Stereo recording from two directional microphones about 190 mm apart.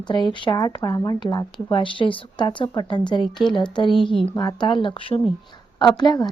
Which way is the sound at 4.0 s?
Centre (ahead or behind).